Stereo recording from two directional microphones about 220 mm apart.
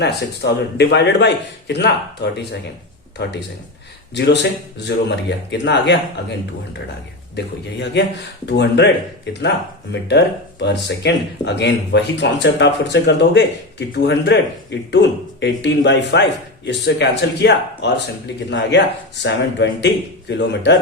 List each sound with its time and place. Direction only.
0.0 s speech: 50° left (ahead or behind)
4.8 s speech: 50° left (ahead or behind)
7.3 s speech: 50° left (ahead or behind)